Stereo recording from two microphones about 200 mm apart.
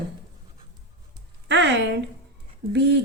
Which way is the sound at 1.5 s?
60° right (ahead or behind).